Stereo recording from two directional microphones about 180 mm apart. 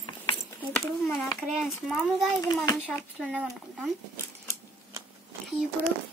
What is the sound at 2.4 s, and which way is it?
Speech, 20° left (ahead or behind).